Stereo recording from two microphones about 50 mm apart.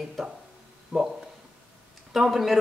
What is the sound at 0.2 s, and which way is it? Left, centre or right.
Speech, centre.